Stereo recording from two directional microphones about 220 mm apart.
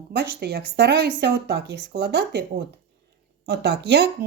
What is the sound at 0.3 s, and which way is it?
Speech, 45° right (ahead or behind).